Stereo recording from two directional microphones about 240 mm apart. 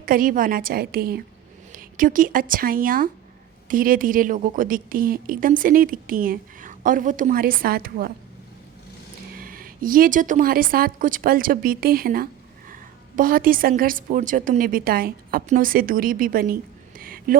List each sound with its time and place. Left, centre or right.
0.0 s a woman's voice: right
9.4 s a woman's voice: right
17.0 s a sound: right